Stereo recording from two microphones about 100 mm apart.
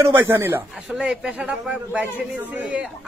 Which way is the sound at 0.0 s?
25° right (ahead or behind).